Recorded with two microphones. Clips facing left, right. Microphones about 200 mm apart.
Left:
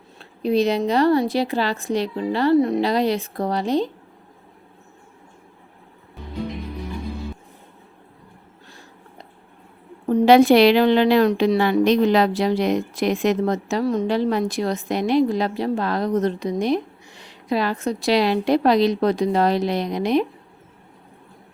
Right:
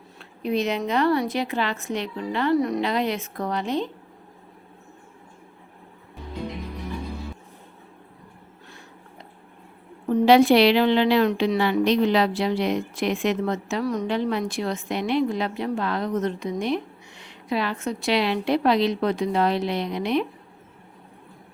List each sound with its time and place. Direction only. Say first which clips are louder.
0.2 s a woman's voice: left 5 dB; 35° left (ahead or behind)
10.1 s a woman's voice: left 3 dB; 45° left (ahead or behind)
13.8 s a woman's voice: left 4 dB; 25° left (ahead or behind)